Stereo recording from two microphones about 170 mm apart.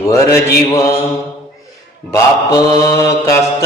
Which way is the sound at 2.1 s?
20° left (ahead or behind).